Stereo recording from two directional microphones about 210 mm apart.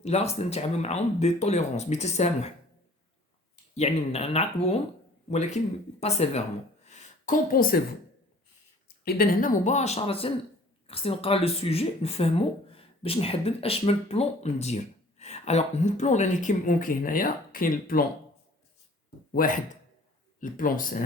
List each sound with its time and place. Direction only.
0.0 s speech: 30° left (ahead or behind)
3.8 s speech: 30° left (ahead or behind)
6.0 s speech: 30° left (ahead or behind)
6.8 s a sound: 35° left (ahead or behind)
9.0 s speech: 45° left (ahead or behind)
19.3 s speech: 40° left (ahead or behind)